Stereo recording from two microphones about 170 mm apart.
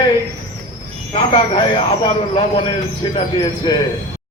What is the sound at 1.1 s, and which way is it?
Speech, 30° left (ahead or behind).